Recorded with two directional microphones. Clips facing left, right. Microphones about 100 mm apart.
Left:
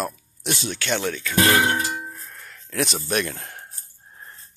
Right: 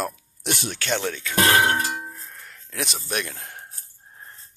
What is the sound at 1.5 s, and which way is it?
Clang, 55° right (ahead or behind).